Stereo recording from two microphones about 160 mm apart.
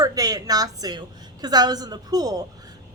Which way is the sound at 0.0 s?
25° right (ahead or behind).